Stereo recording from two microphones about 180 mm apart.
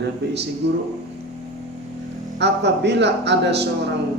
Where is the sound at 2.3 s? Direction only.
70° right (ahead or behind).